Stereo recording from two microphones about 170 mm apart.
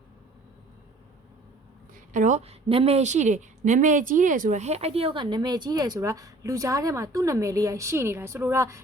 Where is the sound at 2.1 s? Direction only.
45° right (ahead or behind).